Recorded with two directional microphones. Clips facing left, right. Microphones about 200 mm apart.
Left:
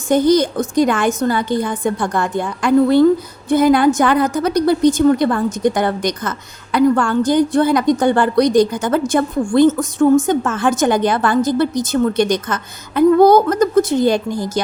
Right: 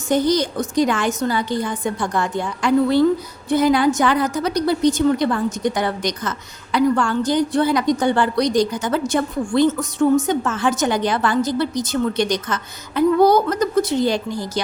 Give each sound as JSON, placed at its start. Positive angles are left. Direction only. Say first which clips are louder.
{"t": 0.1, "sound": "a woman's voice", "louder": "left 5 dB", "side_deg": 50}